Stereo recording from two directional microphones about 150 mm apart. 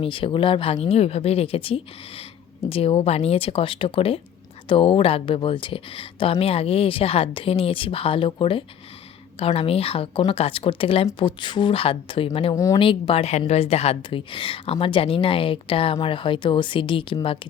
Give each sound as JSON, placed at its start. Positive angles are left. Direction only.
{"t": 0.0, "sound": "a woman's voice", "side_deg": 35}
{"t": 12.5, "sound": "speech", "side_deg": 20}
{"t": 12.8, "sound": "a woman's voice", "side_deg": 35}